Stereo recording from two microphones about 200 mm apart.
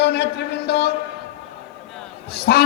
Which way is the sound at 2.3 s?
55° left (ahead or behind).